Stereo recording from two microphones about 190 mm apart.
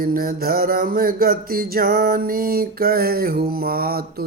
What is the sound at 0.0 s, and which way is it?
Mantra, 50° right (ahead or behind).